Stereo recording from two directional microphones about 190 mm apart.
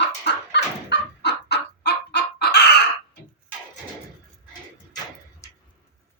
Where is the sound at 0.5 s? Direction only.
65° left (ahead or behind).